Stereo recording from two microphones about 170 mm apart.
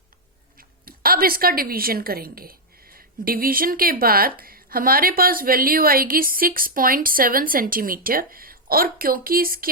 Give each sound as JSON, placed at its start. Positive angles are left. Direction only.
{"t": 0.9, "sound": "a woman's voice", "side_deg": -60}